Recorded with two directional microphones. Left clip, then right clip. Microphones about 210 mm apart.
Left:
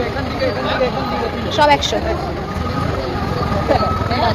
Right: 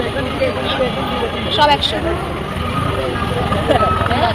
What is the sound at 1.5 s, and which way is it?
Speech, 35° left (ahead or behind).